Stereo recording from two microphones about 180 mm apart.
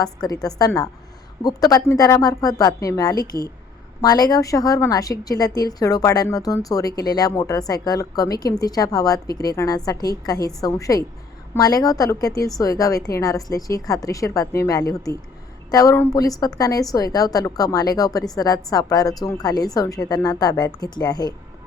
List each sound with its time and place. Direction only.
0.0 s a woman's voice: 20° left (ahead or behind)